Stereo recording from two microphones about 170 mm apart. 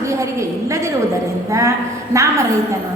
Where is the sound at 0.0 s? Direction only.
15° right (ahead or behind).